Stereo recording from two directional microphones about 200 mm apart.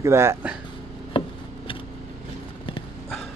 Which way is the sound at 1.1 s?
25° left (ahead or behind).